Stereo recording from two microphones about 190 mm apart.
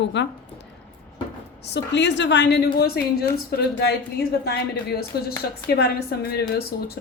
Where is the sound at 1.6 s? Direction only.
65° left (ahead or behind).